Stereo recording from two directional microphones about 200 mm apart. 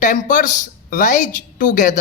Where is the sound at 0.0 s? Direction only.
40° left (ahead or behind).